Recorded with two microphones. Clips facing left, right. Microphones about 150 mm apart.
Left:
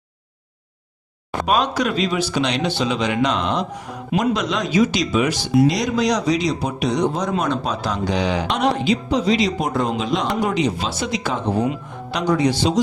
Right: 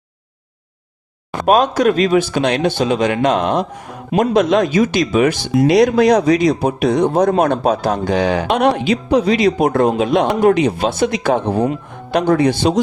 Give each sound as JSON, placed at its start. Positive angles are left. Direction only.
{"t": 1.5, "sound": "speech", "side_deg": -50}